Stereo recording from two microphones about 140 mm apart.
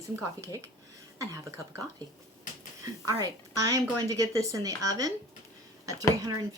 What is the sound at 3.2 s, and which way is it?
Speech, 25° right (ahead or behind).